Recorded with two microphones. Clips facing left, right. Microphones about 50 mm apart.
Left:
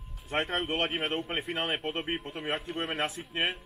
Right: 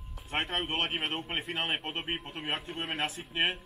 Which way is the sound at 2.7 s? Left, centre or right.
Centre.